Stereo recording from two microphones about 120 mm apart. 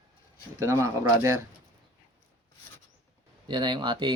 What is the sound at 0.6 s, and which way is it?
Speech, 25° right (ahead or behind).